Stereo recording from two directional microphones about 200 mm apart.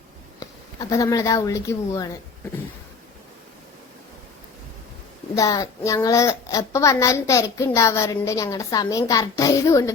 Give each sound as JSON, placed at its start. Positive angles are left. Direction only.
{"t": 0.3, "sound": "a woman's voice", "side_deg": 20}
{"t": 5.3, "sound": "a child's voice", "side_deg": 15}